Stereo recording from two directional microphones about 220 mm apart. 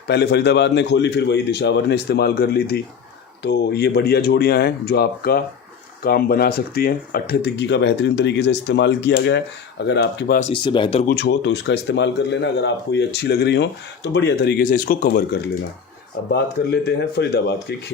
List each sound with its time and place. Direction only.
0.1 s speech: 50° left (ahead or behind)
10.4 s speech: 20° left (ahead or behind)
11.1 s speech: 50° left (ahead or behind)
16.8 s speech: 50° left (ahead or behind)